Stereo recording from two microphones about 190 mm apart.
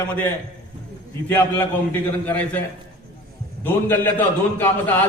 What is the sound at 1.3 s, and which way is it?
A man's voice, 10° left (ahead or behind).